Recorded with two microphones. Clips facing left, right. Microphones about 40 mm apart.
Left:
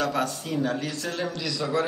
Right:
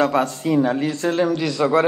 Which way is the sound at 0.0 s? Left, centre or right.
Right.